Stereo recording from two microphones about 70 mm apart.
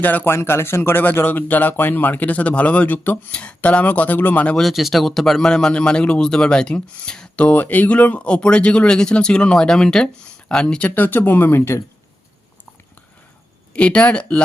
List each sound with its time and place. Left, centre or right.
0.0 s speech: left
0.3 s speech: left
4.5 s speech: centre
7.4 s speech: left
13.7 s speech: centre